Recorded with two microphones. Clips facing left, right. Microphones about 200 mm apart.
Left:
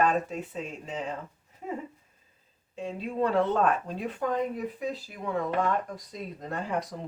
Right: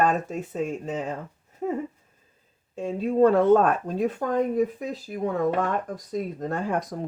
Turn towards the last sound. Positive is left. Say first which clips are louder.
# right 5 dB
turn(degrees=-50)  # may be behind; listen again after turning